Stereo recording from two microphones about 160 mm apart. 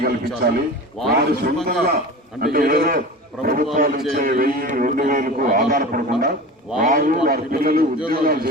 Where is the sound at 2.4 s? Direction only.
65° right (ahead or behind).